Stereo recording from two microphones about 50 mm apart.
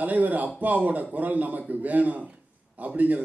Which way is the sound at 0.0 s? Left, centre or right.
Right.